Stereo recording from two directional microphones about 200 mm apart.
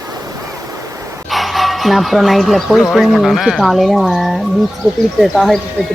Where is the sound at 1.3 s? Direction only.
Centre (ahead or behind).